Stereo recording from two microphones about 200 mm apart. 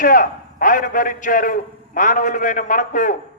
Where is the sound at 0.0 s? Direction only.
45° left (ahead or behind).